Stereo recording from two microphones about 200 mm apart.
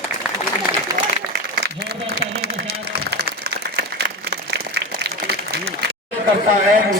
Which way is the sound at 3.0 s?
55° right (ahead or behind).